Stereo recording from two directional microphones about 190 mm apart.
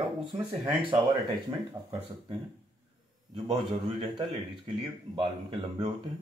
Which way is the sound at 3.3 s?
30° right (ahead or behind).